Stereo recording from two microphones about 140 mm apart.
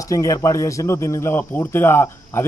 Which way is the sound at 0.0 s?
25° left (ahead or behind).